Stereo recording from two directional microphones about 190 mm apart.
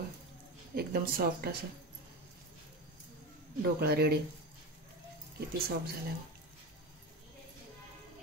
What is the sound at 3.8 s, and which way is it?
Speech, 55° right (ahead or behind).